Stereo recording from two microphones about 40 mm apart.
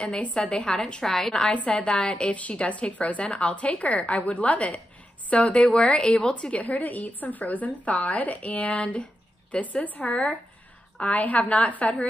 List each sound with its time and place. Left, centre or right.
0.2 s a woman's voice: left
0.6 s a woman's voice: centre
1.7 s a woman's voice: left
6.6 s a woman's voice: left